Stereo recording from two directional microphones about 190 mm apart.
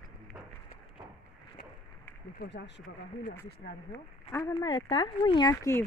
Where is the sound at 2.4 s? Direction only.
65° left (ahead or behind).